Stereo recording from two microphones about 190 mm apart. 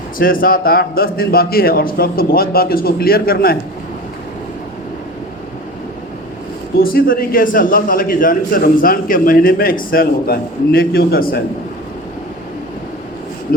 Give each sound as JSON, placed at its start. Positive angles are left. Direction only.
{"t": 0.2, "sound": "a man's voice", "side_deg": 50}
{"t": 6.7, "sound": "a man's voice", "side_deg": 50}